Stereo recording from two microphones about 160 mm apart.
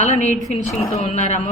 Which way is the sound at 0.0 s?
45° left (ahead or behind).